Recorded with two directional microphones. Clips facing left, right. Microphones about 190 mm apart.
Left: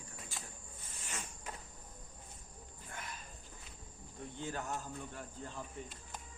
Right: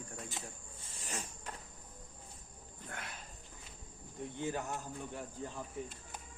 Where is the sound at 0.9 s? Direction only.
35° right (ahead or behind).